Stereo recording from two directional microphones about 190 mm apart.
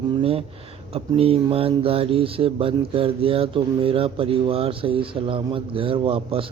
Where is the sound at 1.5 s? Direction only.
30° right (ahead or behind).